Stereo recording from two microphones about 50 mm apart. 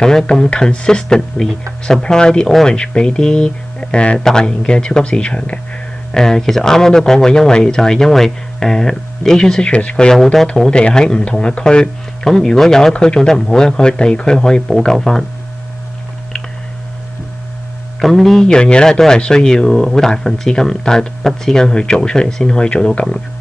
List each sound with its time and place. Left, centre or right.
0.0 s speech: centre
4.2 s speech: centre
6.1 s speech: centre
9.7 s speech: left
10.1 s speech: centre
18.0 s a man's voice: centre
18.5 s speech: centre